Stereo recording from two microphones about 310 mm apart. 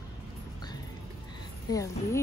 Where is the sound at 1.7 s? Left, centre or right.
Centre.